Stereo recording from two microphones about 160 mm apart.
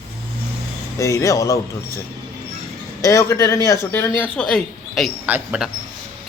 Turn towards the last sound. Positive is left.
turn(degrees=-5)  # may be behind; listen again after turning